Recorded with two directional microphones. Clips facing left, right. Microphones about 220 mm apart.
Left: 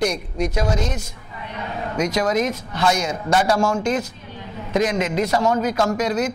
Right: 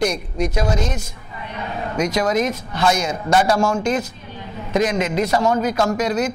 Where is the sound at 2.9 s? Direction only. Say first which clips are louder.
Right 2 dB; 15° right (ahead or behind).